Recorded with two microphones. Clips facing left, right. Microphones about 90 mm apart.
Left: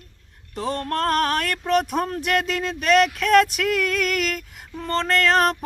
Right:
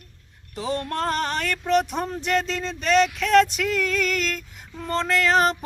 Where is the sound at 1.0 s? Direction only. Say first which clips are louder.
Left 6 dB; centre (ahead or behind).